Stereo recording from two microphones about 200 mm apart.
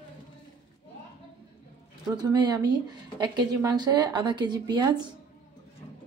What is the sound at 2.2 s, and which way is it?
Speech, 20° right (ahead or behind).